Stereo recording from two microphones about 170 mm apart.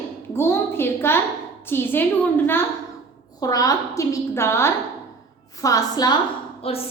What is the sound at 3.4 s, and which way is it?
A woman's voice, 20° left (ahead or behind).